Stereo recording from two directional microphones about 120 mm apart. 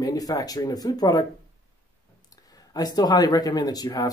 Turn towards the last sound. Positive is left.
turn(degrees=35)  # may be behind; listen again after turning